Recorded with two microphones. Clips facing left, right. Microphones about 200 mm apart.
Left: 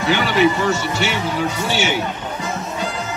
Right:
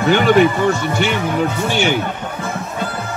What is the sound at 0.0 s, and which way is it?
Speech, 50° right (ahead or behind).